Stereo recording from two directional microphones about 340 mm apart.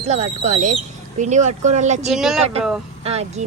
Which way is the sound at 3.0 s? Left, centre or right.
Centre.